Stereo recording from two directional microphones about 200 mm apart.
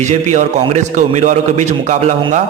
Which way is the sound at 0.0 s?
35° right (ahead or behind).